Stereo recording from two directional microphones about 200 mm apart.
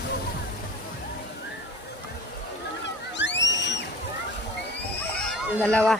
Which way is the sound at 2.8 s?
60° left (ahead or behind).